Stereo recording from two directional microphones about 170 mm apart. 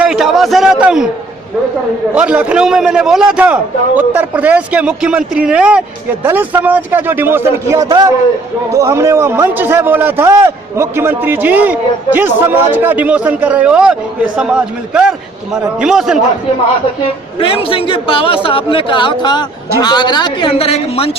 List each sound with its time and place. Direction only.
0.0 s a man's voice: centre (ahead or behind)
2.1 s a man's voice: 5° right (ahead or behind)
17.4 s a man's voice: 30° left (ahead or behind)